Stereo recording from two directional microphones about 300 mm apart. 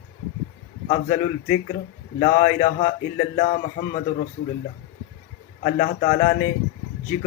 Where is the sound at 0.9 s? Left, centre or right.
Left.